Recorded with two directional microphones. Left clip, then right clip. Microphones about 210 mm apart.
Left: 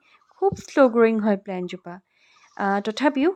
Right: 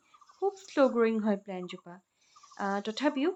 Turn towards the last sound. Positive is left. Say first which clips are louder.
# left 9 dB
turn(degrees=35)  # may be behind; listen again after turning